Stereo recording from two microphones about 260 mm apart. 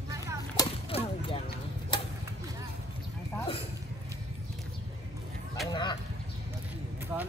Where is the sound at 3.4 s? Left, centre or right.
Left.